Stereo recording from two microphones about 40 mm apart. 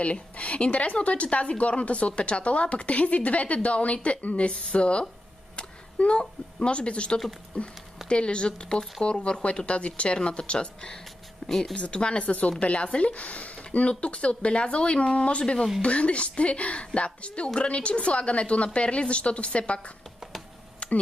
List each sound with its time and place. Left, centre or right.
0.0 s speech: left
11.4 s speech: centre
11.7 s speech: left
20.8 s a sound: left